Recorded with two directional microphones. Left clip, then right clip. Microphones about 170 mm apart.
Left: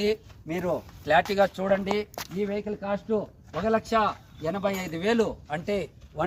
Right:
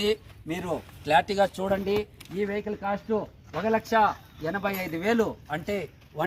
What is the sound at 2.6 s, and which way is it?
Speech, 30° left (ahead or behind).